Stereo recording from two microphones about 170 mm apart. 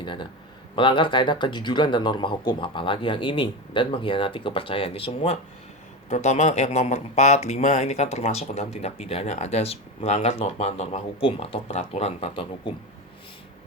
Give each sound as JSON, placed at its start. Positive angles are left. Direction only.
{"t": 0.0, "sound": "speech", "side_deg": 30}